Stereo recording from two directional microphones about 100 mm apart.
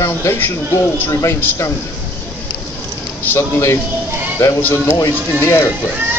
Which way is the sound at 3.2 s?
25° left (ahead or behind).